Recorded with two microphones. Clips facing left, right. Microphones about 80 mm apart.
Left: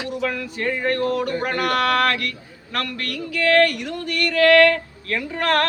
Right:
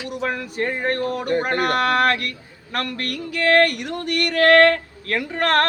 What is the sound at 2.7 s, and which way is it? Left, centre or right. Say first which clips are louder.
Speech: right 1 dB; right.